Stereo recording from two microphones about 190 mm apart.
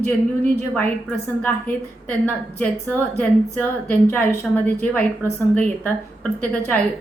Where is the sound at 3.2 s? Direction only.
10° left (ahead or behind).